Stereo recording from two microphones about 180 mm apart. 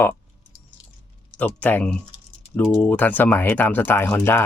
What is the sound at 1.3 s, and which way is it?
Speech, 10° left (ahead or behind).